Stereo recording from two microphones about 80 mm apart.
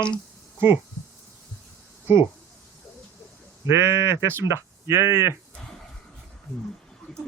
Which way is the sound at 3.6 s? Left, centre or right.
Right.